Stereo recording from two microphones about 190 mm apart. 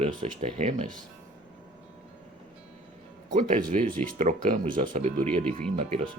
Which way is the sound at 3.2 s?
45° right (ahead or behind).